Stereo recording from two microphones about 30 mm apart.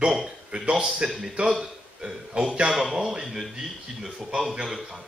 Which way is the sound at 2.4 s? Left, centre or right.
Right.